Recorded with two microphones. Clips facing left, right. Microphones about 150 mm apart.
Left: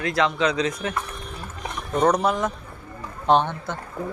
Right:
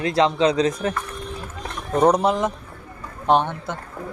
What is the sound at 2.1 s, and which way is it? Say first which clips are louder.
Speech: right 2 dB; 25° right (ahead or behind).